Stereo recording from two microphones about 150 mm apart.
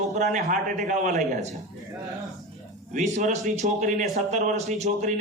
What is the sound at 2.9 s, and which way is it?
A man's voice, 55° right (ahead or behind).